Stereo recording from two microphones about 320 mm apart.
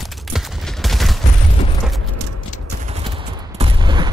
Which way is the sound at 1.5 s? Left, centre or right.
Centre.